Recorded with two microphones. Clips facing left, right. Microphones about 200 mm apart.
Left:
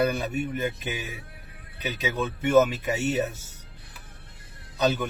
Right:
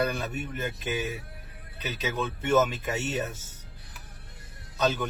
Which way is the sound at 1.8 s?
10° left (ahead or behind).